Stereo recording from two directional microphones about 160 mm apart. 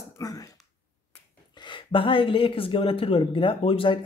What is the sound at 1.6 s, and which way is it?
Speech, 30° left (ahead or behind).